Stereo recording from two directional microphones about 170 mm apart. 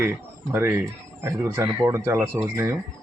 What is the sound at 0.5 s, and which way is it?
Speech, 10° right (ahead or behind).